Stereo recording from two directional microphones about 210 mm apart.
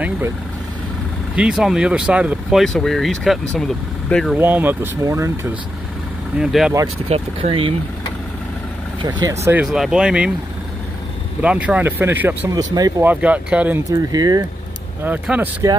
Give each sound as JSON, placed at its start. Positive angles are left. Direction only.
{"t": 1.3, "sound": "speech", "side_deg": -5}
{"t": 4.4, "sound": "speech", "side_deg": -10}
{"t": 6.3, "sound": "speech", "side_deg": 0}
{"t": 7.1, "sound": "speech", "side_deg": -25}
{"t": 9.0, "sound": "speech", "side_deg": -15}
{"t": 11.4, "sound": "speech", "side_deg": -5}